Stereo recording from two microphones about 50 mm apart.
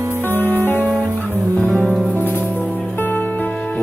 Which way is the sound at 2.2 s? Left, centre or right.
Left.